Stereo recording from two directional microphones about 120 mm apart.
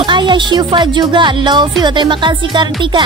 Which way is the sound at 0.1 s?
40° right (ahead or behind).